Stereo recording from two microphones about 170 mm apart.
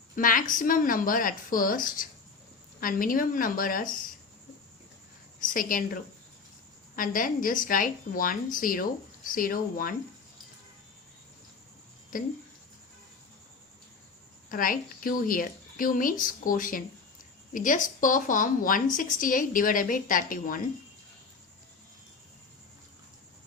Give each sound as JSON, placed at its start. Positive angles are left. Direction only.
{"t": 0.2, "sound": "a woman's voice", "side_deg": 55}
{"t": 5.5, "sound": "a woman's voice", "side_deg": 55}
{"t": 12.1, "sound": "a woman's voice", "side_deg": 55}
{"t": 14.5, "sound": "a woman's voice", "side_deg": 55}